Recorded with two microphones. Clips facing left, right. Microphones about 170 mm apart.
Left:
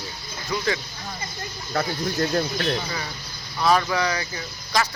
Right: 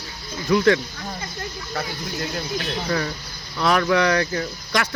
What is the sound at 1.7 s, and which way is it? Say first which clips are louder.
Speech: left 5 dB; 45° left (ahead or behind).